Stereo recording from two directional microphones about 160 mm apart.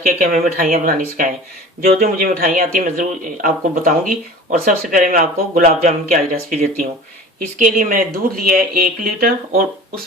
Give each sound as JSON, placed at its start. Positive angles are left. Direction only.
{"t": 0.0, "sound": "speech", "side_deg": -60}